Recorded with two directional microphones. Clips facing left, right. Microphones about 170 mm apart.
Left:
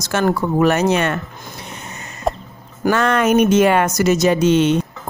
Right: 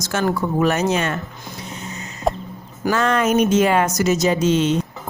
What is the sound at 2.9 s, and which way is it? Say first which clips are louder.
A woman's voice: left 3 dB; 65° left (ahead or behind).